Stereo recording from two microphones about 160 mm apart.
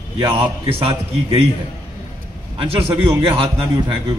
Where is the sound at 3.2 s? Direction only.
35° right (ahead or behind).